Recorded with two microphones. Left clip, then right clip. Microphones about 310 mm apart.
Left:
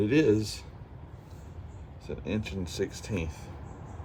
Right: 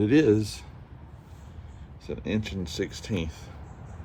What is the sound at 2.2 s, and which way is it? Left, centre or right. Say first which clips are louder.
Speech: right 3 dB; right.